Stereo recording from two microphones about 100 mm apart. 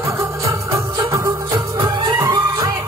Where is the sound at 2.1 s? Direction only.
30° right (ahead or behind).